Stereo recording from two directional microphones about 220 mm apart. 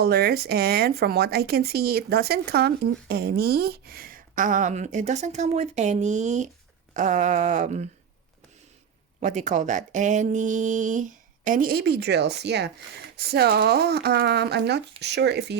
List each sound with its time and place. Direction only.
0.0 s speech: 45° right (ahead or behind)
9.2 s speech: 35° right (ahead or behind); by 15.5 s 50° right (ahead or behind)